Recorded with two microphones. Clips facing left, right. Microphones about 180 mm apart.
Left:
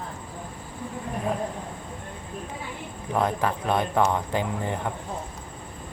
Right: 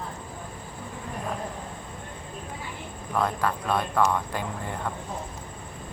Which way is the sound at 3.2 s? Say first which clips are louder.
Left 2 dB; 20° left (ahead or behind).